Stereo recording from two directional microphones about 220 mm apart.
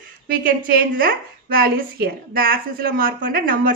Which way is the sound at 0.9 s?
40° right (ahead or behind).